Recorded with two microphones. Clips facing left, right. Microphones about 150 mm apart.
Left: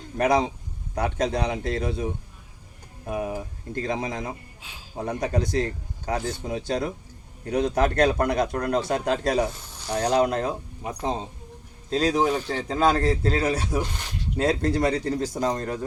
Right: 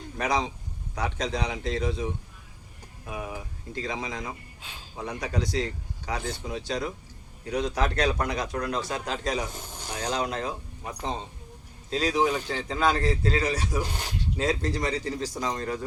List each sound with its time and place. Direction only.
0.2 s a man's voice: 55° left (ahead or behind)
3.1 s a man's voice: 45° left (ahead or behind)
4.6 s a sound: 10° left (ahead or behind)
4.9 s a man's voice: 50° left (ahead or behind)
9.9 s a man's voice: 40° left (ahead or behind)